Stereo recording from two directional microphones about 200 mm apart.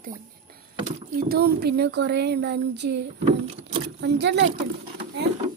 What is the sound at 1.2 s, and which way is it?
Speech, 50° right (ahead or behind).